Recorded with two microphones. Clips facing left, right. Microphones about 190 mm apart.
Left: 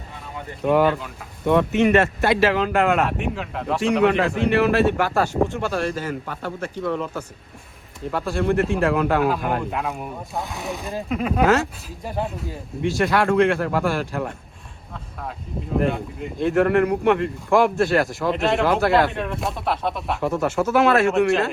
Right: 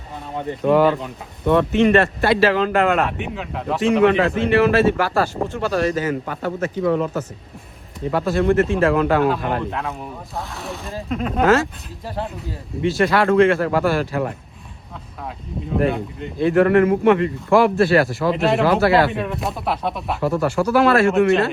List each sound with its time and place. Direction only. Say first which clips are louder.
0.6 s speech: right 2 dB; centre (ahead or behind)
15.7 s speech: right 2 dB; centre (ahead or behind)